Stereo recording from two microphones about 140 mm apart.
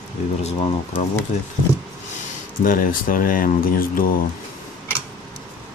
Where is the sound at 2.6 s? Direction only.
80° left.